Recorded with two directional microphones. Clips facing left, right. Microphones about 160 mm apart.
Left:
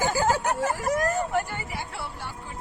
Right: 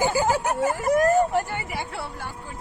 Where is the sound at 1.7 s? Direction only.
55° right (ahead or behind).